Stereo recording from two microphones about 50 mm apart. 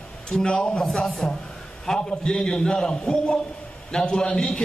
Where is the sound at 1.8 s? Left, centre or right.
Centre.